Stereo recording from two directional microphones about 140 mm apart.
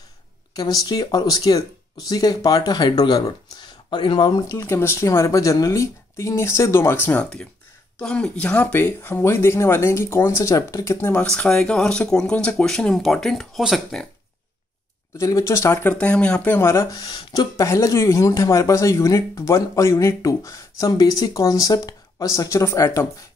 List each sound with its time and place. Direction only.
0.6 s speech: 25° left (ahead or behind)
7.1 s speech: 10° left (ahead or behind)
15.1 s speech: 20° left (ahead or behind)